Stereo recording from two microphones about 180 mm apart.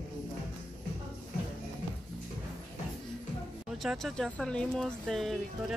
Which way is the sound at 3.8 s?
Centre (ahead or behind).